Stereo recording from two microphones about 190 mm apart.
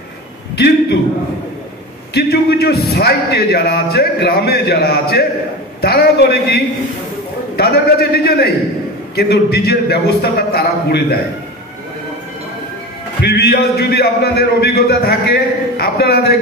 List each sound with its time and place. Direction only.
0.6 s a man's voice: 60° left (ahead or behind)
2.1 s a man's voice: 55° left (ahead or behind)
13.2 s a man's voice: 55° left (ahead or behind)